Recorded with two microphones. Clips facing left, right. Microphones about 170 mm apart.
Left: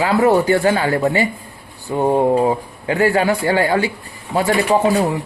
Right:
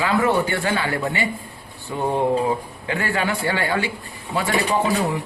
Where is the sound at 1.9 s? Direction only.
25° left (ahead or behind).